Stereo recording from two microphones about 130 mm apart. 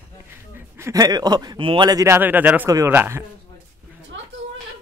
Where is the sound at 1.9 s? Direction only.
25° right (ahead or behind).